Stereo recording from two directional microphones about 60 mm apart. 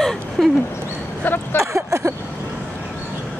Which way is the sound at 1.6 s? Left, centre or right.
Right.